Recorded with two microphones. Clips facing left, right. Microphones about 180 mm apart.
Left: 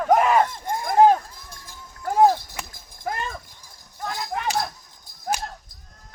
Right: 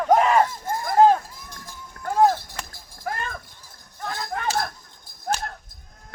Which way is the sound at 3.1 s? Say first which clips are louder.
Left 1 dB; 20° left (ahead or behind).